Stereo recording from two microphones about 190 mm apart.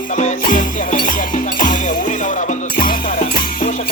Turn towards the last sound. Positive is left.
turn(degrees=45)  # may be behind; listen again after turning